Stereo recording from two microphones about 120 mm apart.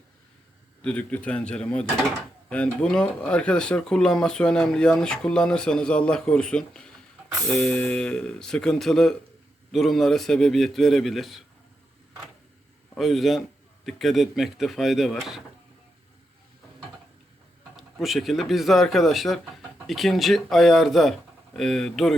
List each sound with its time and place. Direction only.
0.8 s speech: 10° left (ahead or behind)
13.0 s speech: centre (ahead or behind)
17.7 s speech: centre (ahead or behind)